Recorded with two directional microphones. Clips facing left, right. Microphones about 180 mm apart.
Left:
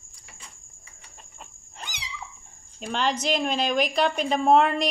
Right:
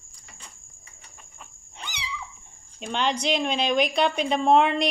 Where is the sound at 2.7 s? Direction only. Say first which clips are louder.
Even; centre (ahead or behind).